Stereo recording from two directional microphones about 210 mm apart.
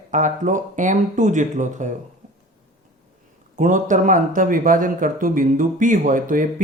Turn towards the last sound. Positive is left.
turn(degrees=-40)  # may be behind; listen again after turning